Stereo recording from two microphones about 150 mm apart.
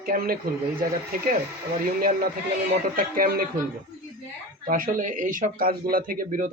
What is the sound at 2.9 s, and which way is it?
Speech, 75° right (ahead or behind).